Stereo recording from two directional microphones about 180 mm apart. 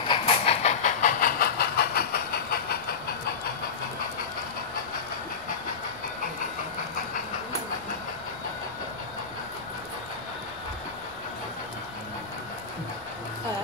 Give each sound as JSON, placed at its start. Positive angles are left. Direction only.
{"t": 0.1, "sound": "vehicle", "side_deg": 35}